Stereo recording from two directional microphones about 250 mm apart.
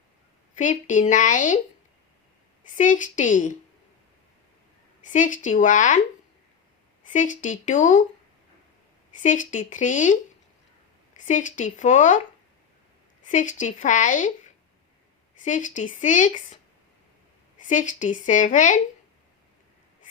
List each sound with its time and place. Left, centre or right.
0.5 s a woman's voice: left
2.7 s a woman's voice: left
5.0 s a woman's voice: left
7.1 s speech: left
9.2 s a woman's voice: left
11.3 s speech: left
13.2 s a woman's voice: left
15.4 s a woman's voice: left
17.6 s a woman's voice: left